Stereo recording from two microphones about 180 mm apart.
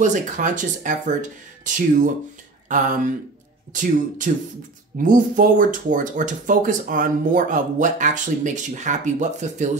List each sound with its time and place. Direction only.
0.0 s speech: 45° right (ahead or behind)